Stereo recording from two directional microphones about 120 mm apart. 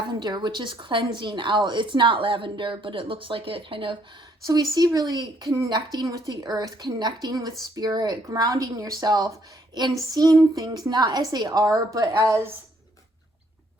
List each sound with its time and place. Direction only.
0.1 s a woman's voice: 40° right (ahead or behind)
4.9 s a woman's voice: 35° right (ahead or behind)